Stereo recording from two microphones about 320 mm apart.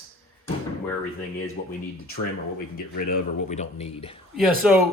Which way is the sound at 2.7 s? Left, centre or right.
Left.